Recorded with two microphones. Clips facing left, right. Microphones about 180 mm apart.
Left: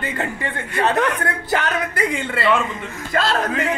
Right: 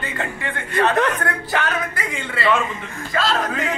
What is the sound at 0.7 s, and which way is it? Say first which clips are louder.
Speech: right 1 dB; 10° left (ahead or behind).